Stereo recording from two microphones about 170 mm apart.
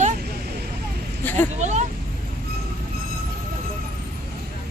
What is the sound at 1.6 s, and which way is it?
Speech, 45° right (ahead or behind).